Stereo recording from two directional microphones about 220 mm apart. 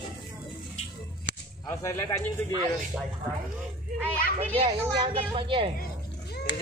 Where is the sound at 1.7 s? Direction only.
15° left (ahead or behind).